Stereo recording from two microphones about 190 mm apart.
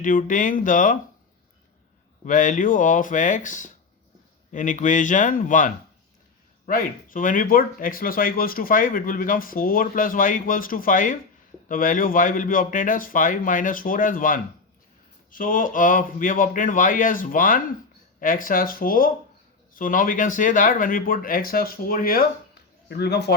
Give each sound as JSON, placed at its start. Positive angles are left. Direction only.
{"t": 0.0, "sound": "speech", "side_deg": 45}
{"t": 2.2, "sound": "speech", "side_deg": 45}